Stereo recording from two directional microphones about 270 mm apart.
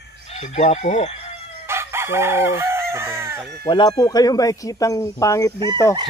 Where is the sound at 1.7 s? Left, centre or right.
Centre.